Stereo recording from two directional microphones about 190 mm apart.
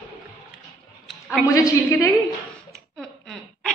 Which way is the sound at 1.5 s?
15° left (ahead or behind).